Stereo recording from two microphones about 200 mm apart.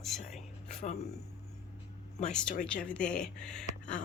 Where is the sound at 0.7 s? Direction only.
35° left (ahead or behind).